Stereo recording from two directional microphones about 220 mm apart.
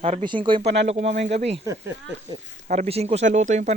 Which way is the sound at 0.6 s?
50° right (ahead or behind).